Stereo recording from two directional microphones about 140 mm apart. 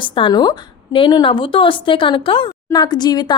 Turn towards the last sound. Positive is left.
turn(degrees=30)  # may be behind; listen again after turning